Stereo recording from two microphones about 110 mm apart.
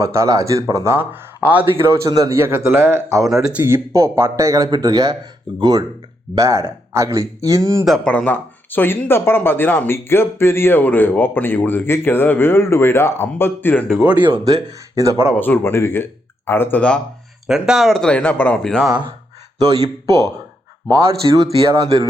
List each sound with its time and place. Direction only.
0.0 s speech: 30° right (ahead or behind)
3.2 s speech: centre (ahead or behind)
3.5 s speech: 20° right (ahead or behind); by 5.8 s 40° right (ahead or behind)
6.3 s speech: 30° right (ahead or behind)
7.9 s speech: 5° left (ahead or behind)
14.0 s speech: 15° right (ahead or behind)
14.4 s speech: 30° right (ahead or behind)
15.4 s speech: 20° left (ahead or behind)
17.4 s speech: 5° right (ahead or behind); by 18.6 s 15° left (ahead or behind)
18.6 s speech: 5° left (ahead or behind)
19.6 s speech: 35° right (ahead or behind)